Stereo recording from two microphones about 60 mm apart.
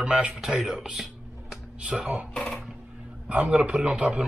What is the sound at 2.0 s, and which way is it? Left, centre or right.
A man's voice, right.